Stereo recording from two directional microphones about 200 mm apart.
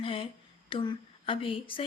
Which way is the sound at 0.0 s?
25° left (ahead or behind).